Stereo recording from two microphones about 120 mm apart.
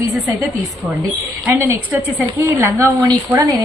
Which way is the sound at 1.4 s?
15° right (ahead or behind).